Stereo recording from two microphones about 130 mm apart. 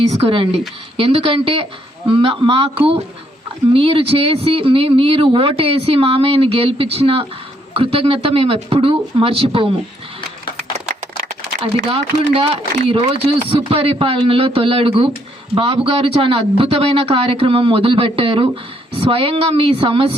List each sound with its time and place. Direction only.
0.1 s speech: 50° right (ahead or behind)
11.6 s speech: 45° right (ahead or behind)